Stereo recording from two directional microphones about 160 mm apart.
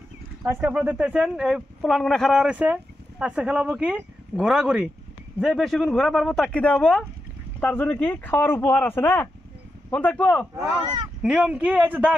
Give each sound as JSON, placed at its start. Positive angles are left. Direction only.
{"t": 0.4, "sound": "speech", "side_deg": -15}
{"t": 11.2, "sound": "a man's voice", "side_deg": -5}